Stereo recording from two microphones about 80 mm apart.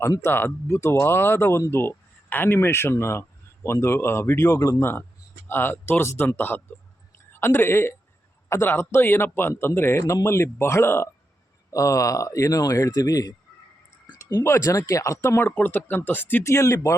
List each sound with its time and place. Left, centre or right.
0.2 s speech: left
4.8 s speech: left
11.7 s a man's voice: left
14.4 s speech: left
16.5 s speech: left